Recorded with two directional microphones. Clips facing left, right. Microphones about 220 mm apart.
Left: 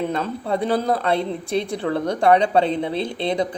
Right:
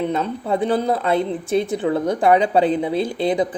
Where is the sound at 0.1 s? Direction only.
5° right (ahead or behind).